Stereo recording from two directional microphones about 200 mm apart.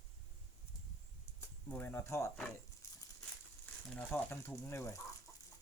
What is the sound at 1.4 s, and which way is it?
Speech, 10° left (ahead or behind).